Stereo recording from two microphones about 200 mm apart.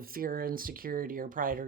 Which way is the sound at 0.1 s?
45° right (ahead or behind).